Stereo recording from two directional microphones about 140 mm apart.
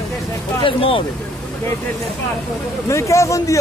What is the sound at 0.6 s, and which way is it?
Speech, 40° left (ahead or behind).